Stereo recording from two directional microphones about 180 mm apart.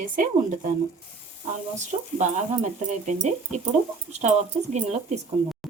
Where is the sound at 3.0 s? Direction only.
40° right (ahead or behind).